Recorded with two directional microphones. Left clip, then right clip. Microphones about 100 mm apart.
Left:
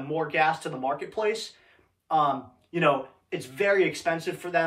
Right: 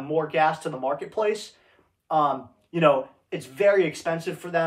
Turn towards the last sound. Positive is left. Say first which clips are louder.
# right 1 dB
turn(degrees=-40)  # may be behind; listen again after turning